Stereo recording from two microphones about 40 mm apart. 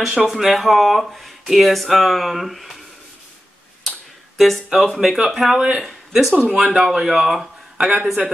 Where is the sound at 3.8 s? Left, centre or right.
Centre.